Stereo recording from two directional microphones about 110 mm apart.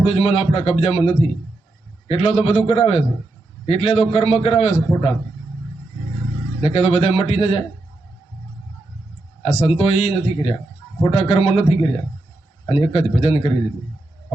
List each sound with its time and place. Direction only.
0.0 s a man's voice: 65° left (ahead or behind)
6.6 s a man's voice: 65° left (ahead or behind)
9.4 s a man's voice: 75° left (ahead or behind)